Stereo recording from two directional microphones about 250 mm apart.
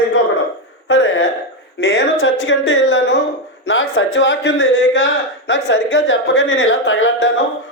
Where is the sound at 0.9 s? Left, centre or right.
Left.